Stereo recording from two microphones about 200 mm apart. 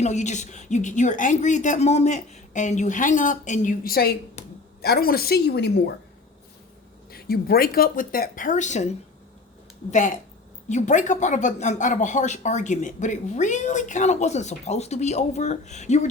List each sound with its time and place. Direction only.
0.0 s speech: 35° left (ahead or behind); by 5.7 s 55° left (ahead or behind)
7.1 s speech: 50° left (ahead or behind)